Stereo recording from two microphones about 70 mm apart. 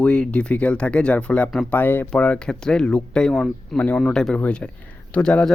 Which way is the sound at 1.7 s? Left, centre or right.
Left.